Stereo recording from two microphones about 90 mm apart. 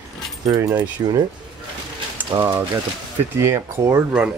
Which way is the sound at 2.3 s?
55° right (ahead or behind).